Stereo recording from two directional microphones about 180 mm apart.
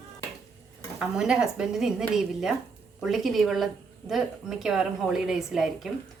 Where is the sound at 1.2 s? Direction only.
5° right (ahead or behind).